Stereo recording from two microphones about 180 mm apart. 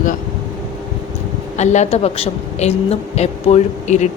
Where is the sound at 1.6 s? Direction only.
40° left (ahead or behind).